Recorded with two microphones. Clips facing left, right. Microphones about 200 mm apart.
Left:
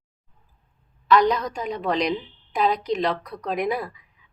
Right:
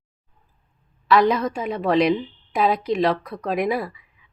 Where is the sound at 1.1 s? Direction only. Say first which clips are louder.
Right 1 dB; 5° right (ahead or behind).